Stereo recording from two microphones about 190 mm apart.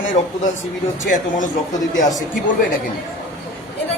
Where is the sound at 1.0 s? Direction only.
40° left (ahead or behind).